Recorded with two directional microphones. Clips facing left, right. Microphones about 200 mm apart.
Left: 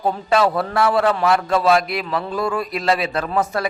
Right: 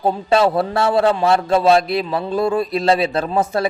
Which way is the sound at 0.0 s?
25° right (ahead or behind).